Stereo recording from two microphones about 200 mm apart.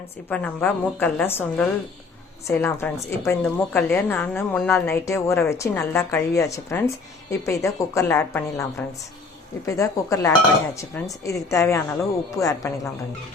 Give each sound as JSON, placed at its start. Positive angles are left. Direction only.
{"t": 0.3, "sound": "a woman's voice", "side_deg": 10}
{"t": 9.6, "sound": "a woman's voice", "side_deg": 15}